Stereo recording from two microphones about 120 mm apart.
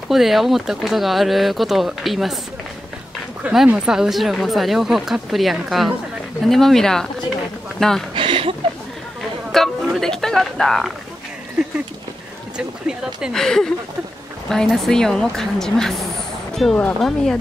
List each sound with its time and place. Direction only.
0.1 s speech: centre (ahead or behind)
3.4 s speech: 10° right (ahead or behind)
8.1 s a sound: 45° right (ahead or behind)
9.5 s speech: 5° left (ahead or behind)
12.5 s speech: 5° right (ahead or behind)